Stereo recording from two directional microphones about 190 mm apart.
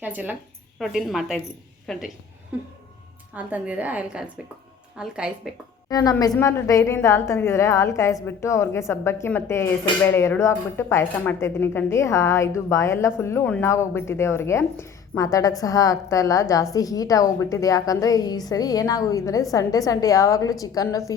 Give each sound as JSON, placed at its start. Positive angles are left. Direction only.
{"t": 0.0, "sound": "a woman's voice", "side_deg": -10}
{"t": 5.9, "sound": "a woman's voice", "side_deg": 20}